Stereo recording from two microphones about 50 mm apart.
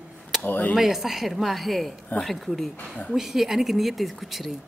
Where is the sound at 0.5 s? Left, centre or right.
Left.